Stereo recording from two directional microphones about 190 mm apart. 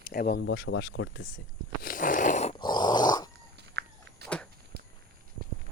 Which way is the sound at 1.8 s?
50° left (ahead or behind).